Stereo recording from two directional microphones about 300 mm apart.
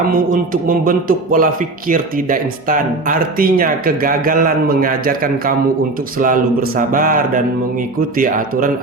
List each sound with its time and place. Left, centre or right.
0.1 s speech: right